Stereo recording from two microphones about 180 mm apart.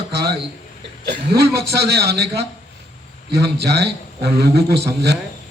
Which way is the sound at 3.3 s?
65° right (ahead or behind).